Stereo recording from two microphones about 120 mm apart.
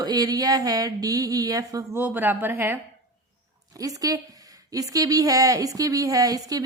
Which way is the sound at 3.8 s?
30° right (ahead or behind).